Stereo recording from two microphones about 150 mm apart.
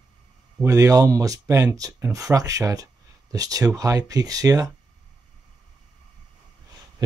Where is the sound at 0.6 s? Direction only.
20° right (ahead or behind).